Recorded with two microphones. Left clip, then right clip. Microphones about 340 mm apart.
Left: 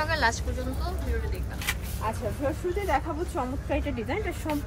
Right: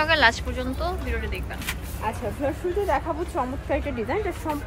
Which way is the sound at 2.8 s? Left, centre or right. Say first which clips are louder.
Right 3 dB; centre.